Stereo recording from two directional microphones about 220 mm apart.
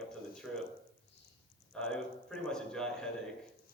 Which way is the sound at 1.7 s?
5° left (ahead or behind).